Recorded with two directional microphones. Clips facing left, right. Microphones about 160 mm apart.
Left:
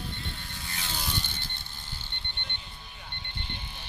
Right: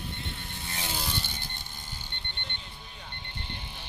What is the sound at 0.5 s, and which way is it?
Vehicle, 25° right (ahead or behind).